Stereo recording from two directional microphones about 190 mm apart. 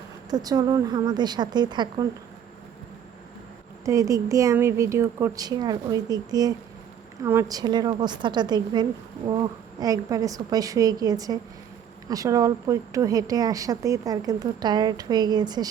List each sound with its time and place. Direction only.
0.3 s a woman's voice: 20° right (ahead or behind)
3.8 s a woman's voice: 15° right (ahead or behind)